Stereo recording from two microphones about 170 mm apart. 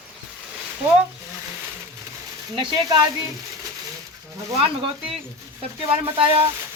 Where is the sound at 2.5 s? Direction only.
25° right (ahead or behind).